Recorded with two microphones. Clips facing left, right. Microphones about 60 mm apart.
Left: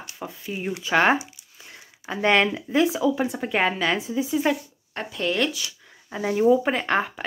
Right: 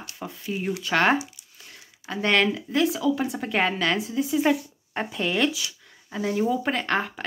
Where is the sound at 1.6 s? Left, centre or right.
Centre.